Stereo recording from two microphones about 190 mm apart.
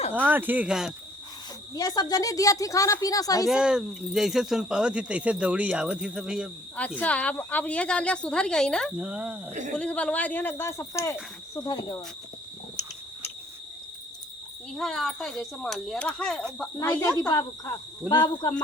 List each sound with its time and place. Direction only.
0.1 s speech: 10° right (ahead or behind)
1.7 s a woman's voice: 20° left (ahead or behind)
3.4 s speech: 5° right (ahead or behind)
6.7 s speech: 10° left (ahead or behind)
9.5 s speech: 40° right (ahead or behind)
9.7 s speech: 5° left (ahead or behind); by 12.0 s 20° left (ahead or behind)
14.8 s speech: centre (ahead or behind)
17.0 s a woman's voice: 20° left (ahead or behind)